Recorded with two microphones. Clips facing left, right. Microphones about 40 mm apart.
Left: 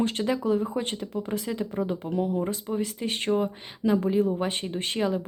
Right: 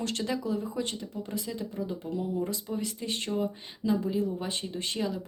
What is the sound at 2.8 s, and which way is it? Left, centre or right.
Speech, left.